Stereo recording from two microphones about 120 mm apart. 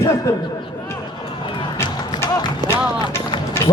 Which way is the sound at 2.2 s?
20° left (ahead or behind).